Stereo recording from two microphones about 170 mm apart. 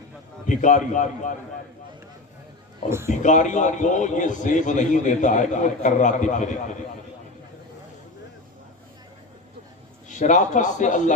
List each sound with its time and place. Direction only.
0.4 s a man's voice: 45° left (ahead or behind)
3.1 s a man's voice: 45° left (ahead or behind)
10.1 s a man's voice: 45° left (ahead or behind)